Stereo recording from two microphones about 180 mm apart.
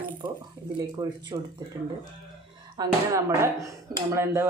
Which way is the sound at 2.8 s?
20° right (ahead or behind).